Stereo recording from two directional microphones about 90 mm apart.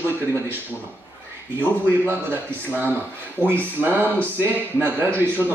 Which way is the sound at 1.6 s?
20° right (ahead or behind).